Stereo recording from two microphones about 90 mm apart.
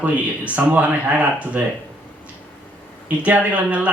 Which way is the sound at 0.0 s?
15° right (ahead or behind).